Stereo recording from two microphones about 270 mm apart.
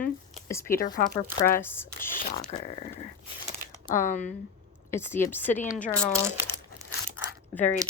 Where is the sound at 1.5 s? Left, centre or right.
Centre.